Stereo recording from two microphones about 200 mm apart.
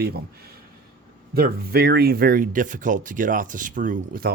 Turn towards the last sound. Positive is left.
turn(degrees=-45)  # may be behind; listen again after turning